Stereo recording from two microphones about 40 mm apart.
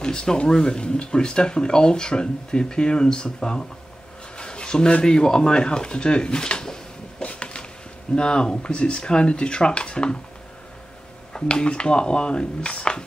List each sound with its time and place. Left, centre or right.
0.0 s speech: centre
7.2 s a sound: left
8.2 s speech: left
11.3 s speech: left